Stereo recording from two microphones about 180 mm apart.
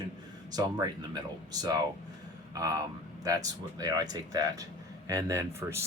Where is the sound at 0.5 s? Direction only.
20° right (ahead or behind).